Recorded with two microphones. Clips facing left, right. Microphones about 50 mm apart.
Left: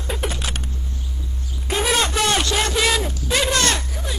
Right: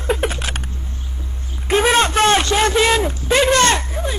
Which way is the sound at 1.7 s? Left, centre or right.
Right.